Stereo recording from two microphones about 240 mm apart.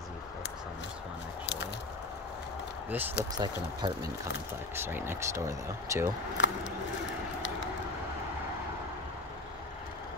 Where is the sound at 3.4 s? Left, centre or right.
Centre.